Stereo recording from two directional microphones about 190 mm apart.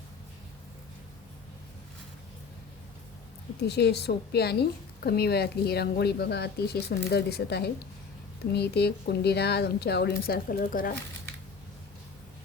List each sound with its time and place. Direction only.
3.6 s a woman's voice: 60° left (ahead or behind)